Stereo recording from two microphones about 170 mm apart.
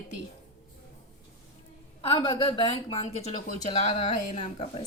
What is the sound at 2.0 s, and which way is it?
A woman's voice, 30° left (ahead or behind).